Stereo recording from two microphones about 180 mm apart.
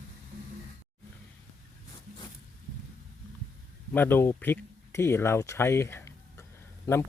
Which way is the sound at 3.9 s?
10° left (ahead or behind).